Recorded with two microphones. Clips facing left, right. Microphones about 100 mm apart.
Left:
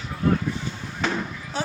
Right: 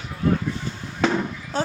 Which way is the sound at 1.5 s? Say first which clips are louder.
Right 4 dB; 40° right (ahead or behind).